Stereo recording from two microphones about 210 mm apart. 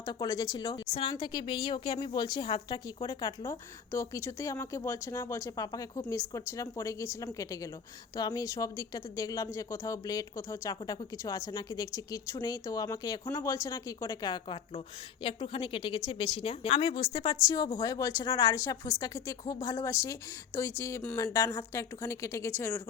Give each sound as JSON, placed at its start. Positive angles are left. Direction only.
{"t": 0.0, "sound": "speech", "side_deg": 15}